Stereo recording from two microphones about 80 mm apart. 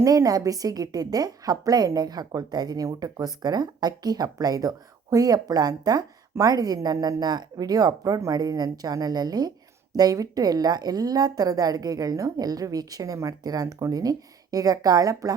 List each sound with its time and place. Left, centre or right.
0.0 s a woman's voice: right